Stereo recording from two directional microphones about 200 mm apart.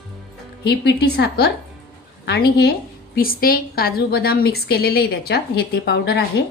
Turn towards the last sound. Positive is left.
turn(degrees=55)  # may be behind; listen again after turning